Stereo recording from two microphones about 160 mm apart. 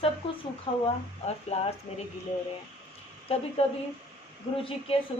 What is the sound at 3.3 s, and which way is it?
Speech, 35° left (ahead or behind).